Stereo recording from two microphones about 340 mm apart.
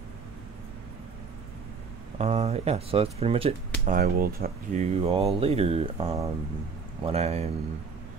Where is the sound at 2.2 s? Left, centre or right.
Centre.